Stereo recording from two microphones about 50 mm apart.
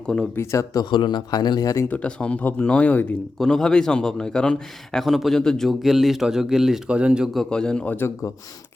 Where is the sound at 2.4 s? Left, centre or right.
Left.